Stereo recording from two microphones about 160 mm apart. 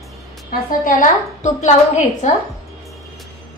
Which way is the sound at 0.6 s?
55° left (ahead or behind).